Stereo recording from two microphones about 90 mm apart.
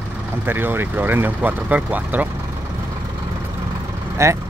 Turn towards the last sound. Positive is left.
turn(degrees=-35)  # may be behind; listen again after turning